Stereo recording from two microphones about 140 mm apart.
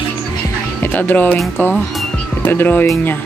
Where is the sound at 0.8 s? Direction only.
10° left (ahead or behind).